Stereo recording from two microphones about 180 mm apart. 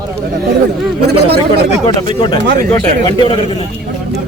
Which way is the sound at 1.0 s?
65° right (ahead or behind).